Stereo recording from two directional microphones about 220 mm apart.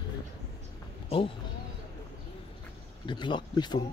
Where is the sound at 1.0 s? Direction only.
25° left (ahead or behind).